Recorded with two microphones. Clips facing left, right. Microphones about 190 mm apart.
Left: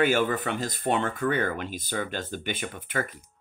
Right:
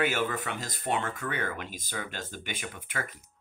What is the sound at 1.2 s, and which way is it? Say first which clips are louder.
Speech: left 9 dB; 35° left (ahead or behind).